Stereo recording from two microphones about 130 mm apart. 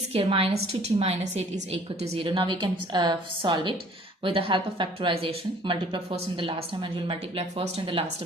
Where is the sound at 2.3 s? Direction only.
40° right (ahead or behind).